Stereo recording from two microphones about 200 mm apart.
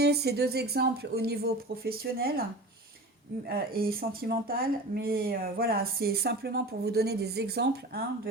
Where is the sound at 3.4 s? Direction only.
50° right (ahead or behind).